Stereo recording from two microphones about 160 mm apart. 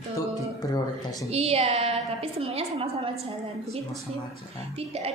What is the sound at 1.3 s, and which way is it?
A woman's voice, 40° right (ahead or behind).